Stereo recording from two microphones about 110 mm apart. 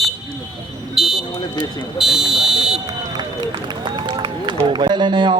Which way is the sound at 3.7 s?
45° right (ahead or behind).